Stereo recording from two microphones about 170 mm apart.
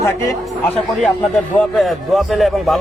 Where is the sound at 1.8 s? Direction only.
Centre (ahead or behind).